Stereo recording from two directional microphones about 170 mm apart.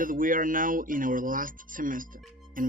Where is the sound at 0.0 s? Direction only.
55° right (ahead or behind).